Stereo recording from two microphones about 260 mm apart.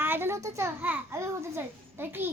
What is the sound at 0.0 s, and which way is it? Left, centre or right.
A child's voice, centre.